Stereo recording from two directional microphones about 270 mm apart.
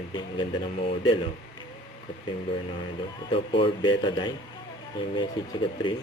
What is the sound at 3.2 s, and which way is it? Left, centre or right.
A woman's voice, centre.